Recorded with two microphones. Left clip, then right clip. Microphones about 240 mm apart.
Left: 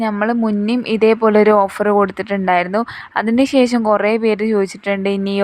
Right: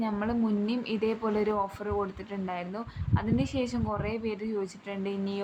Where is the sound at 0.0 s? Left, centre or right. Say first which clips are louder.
Left 14 dB; left.